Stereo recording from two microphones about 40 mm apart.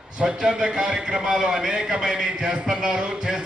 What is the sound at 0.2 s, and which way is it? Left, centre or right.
A man's voice, right.